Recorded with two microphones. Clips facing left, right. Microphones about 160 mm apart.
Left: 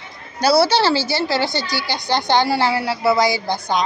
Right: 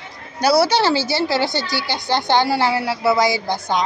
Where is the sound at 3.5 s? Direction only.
15° left (ahead or behind).